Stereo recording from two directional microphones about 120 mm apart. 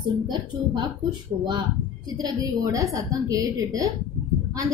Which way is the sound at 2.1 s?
35° right (ahead or behind).